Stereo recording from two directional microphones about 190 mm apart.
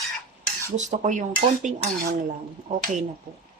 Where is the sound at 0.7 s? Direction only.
40° right (ahead or behind).